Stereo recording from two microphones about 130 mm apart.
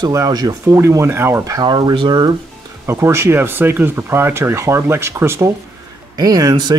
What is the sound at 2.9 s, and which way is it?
Speech, 20° right (ahead or behind).